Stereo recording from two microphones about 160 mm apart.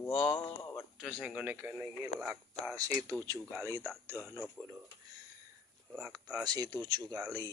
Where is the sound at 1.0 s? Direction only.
Centre (ahead or behind).